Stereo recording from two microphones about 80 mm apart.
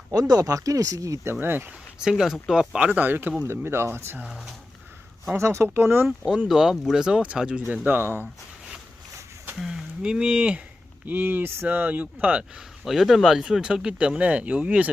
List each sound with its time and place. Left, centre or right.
0.1 s speech: right
2.0 s speech: centre; by 4.3 s right
4.3 s speech: centre
5.4 s speech: right
6.1 s speech: centre
7.7 s speech: right
9.6 s speech: centre